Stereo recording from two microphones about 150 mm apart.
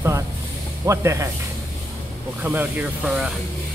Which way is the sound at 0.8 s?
20° right (ahead or behind).